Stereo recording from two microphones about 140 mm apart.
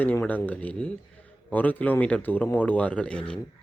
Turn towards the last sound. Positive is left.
turn(degrees=5)  # may be behind; listen again after turning